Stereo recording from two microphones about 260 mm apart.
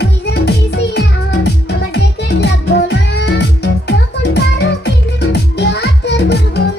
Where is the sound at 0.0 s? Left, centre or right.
Left.